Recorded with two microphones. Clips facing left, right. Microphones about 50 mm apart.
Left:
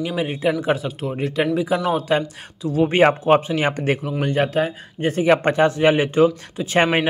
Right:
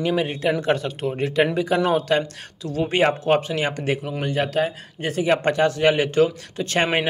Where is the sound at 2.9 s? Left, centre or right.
Left.